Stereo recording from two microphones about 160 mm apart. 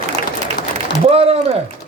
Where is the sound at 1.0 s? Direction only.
40° right (ahead or behind).